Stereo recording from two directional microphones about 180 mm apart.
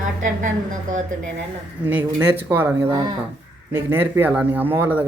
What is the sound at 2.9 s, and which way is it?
Speech, 25° right (ahead or behind).